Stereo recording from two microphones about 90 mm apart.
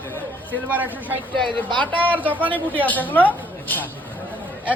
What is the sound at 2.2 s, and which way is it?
Speech, 20° right (ahead or behind).